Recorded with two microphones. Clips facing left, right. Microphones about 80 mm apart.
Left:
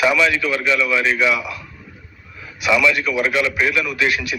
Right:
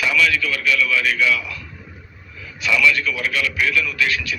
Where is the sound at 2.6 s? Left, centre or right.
Centre.